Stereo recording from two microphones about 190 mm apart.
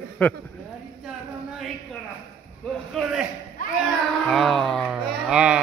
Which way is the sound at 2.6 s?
5° left (ahead or behind).